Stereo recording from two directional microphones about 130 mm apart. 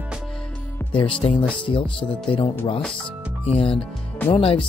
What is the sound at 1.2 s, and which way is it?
Speech, 40° left (ahead or behind).